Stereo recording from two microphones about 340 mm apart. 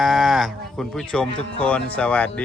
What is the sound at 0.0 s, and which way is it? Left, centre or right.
Speech, centre.